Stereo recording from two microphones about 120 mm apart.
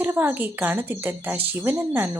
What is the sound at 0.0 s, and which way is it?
Speech, 15° right (ahead or behind).